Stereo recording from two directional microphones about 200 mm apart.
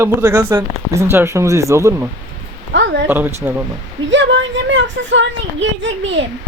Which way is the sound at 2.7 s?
60° right (ahead or behind).